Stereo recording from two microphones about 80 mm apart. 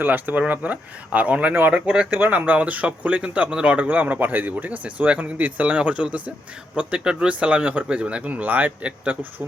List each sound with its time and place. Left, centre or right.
0.0 s speech: right